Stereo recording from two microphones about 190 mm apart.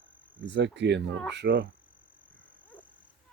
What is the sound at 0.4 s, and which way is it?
Speech, 65° right (ahead or behind).